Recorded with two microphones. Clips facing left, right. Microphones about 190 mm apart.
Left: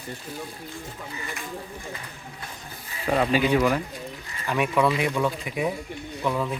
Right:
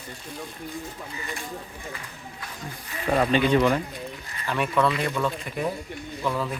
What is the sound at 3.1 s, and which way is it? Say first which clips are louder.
Speech: right 1 dB; 5° left (ahead or behind).